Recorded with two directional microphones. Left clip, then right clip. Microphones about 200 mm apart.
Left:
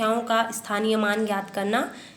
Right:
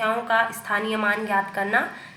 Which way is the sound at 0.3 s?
25° left (ahead or behind).